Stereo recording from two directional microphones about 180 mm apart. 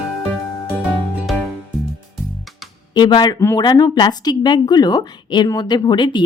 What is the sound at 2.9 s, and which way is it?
A woman's voice, 25° left (ahead or behind).